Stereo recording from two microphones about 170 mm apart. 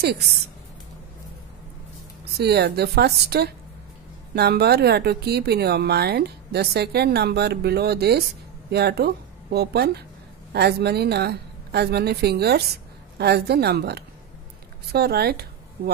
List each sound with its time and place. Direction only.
2.3 s a woman's voice: 70° right (ahead or behind)